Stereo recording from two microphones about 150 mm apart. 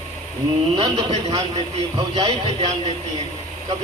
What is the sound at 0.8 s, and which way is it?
Speech, 35° right (ahead or behind).